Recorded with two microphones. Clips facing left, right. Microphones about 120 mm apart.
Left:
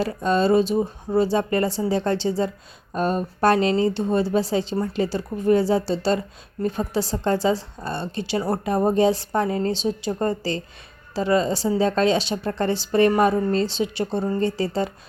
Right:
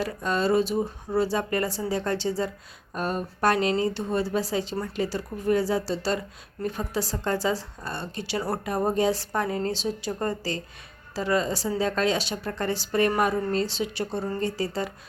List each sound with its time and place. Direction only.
0.0 s speech: 25° left (ahead or behind)